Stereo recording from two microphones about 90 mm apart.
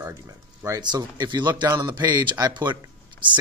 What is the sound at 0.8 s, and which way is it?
Speech, 55° right (ahead or behind).